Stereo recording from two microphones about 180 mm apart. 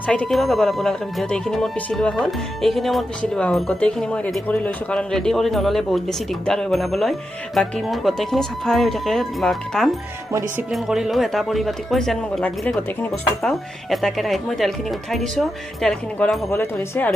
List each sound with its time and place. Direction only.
0.1 s speech: 5° left (ahead or behind)
15.8 s speech: 5° left (ahead or behind)